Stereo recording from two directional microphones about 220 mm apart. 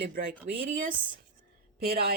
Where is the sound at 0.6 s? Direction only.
40° right (ahead or behind).